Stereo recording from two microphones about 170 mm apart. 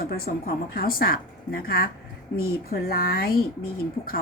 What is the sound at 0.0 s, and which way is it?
A woman's voice, 65° left (ahead or behind).